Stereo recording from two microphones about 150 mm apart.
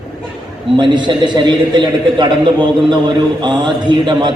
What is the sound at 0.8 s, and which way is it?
A man's voice, 30° right (ahead or behind).